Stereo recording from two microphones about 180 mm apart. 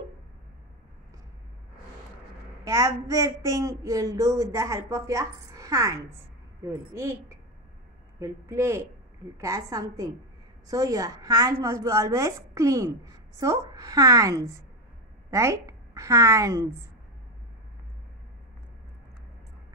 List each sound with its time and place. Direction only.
2.6 s a woman's voice: 15° right (ahead or behind)